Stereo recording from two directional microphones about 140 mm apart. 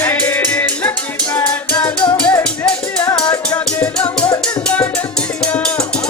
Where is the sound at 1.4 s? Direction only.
30° left (ahead or behind).